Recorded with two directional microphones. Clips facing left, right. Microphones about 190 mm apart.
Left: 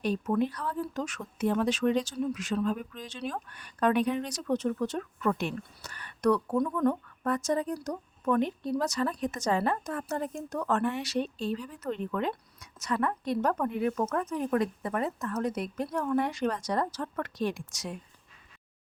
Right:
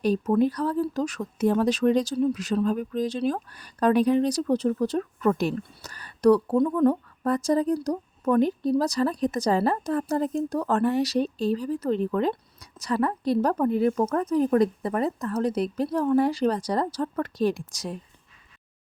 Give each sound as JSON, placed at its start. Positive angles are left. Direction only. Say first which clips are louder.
{"t": 0.0, "sound": "speech", "louder": "right 6 dB", "side_deg": -35}